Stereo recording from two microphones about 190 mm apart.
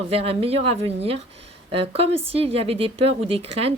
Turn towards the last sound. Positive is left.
turn(degrees=-30)  # may be behind; listen again after turning